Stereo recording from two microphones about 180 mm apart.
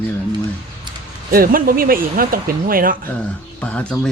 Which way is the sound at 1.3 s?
55° right (ahead or behind).